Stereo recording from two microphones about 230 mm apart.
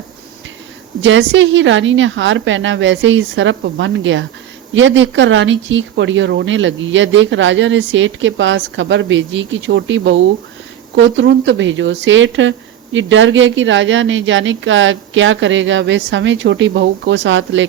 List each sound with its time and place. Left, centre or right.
1.0 s speech: right